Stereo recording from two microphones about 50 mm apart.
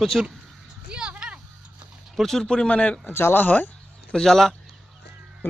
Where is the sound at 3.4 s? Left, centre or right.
Left.